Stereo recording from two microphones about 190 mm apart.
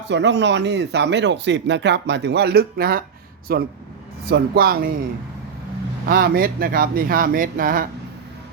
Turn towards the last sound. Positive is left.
turn(degrees=-45)  # may be behind; listen again after turning